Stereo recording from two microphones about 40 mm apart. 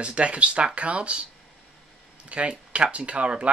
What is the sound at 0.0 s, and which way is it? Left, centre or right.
Speech, right.